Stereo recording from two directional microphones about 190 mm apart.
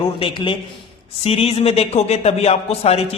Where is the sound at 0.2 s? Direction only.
25° left (ahead or behind).